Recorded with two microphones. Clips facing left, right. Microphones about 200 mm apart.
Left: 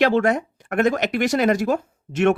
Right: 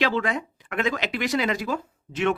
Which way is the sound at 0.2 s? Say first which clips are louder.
Left 7 dB; 45° left (ahead or behind).